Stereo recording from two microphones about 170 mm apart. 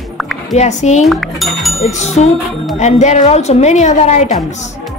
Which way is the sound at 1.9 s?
40° left (ahead or behind).